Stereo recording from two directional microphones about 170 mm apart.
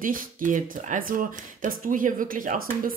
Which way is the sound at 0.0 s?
55° right (ahead or behind).